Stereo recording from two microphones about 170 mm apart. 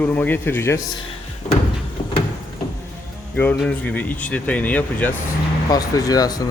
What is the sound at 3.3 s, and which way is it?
A man's voice, 10° left (ahead or behind).